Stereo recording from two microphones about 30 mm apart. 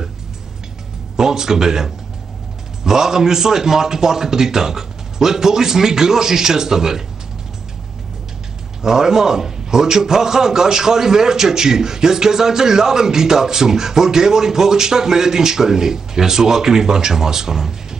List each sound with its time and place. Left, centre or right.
1.1 s a man's voice: centre
8.8 s a man's voice: centre